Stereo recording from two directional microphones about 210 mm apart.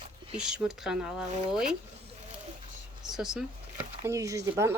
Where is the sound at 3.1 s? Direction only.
Centre (ahead or behind).